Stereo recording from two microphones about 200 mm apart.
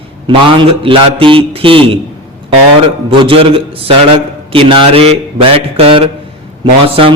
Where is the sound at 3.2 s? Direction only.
25° right (ahead or behind).